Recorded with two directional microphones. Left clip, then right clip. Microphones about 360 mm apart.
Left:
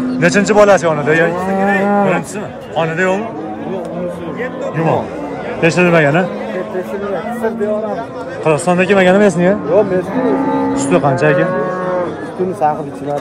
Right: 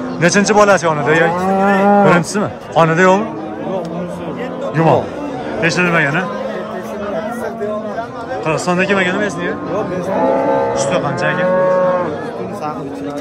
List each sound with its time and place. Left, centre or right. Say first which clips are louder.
0.2 s a man's voice: left 1 dB; centre
1.6 s speech: right 2 dB; right
5.6 s speech: left 3 dB; centre
8.5 s speech: left 4 dB; centre
10.1 s music: right 5 dB; right
10.8 s speech: left 3 dB; centre